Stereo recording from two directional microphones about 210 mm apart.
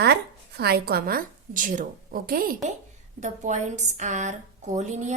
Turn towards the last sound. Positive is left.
turn(degrees=-35)  # may be behind; listen again after turning